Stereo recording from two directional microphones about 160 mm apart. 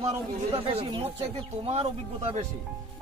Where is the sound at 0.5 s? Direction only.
35° right (ahead or behind).